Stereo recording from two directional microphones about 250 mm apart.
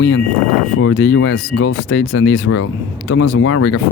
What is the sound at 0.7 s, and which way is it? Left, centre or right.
Speech, left.